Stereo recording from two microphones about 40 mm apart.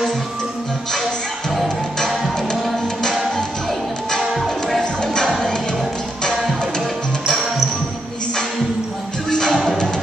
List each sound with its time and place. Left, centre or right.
2.0 s music: centre
4.2 s music: centre
5.0 s music: centre
9.5 s music: centre